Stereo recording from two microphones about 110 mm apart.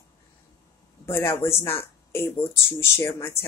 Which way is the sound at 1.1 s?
20° left (ahead or behind).